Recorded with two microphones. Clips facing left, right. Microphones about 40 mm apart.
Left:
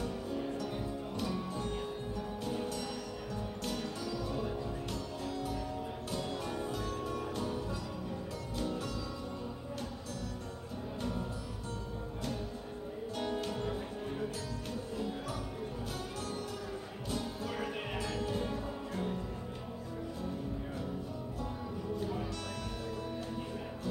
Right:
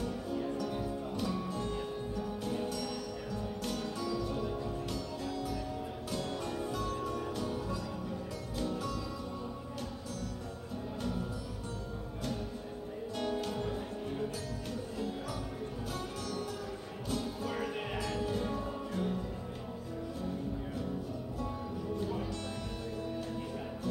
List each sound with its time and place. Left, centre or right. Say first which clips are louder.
0.7 s music: right 2 dB; centre
2.4 s music: even; centre
3.7 s music: right 3 dB; centre
6.7 s music: right 2 dB; left
13.2 s music: right 1 dB; centre
13.5 s music: right 1 dB; centre
18.4 s music: right 1 dB; centre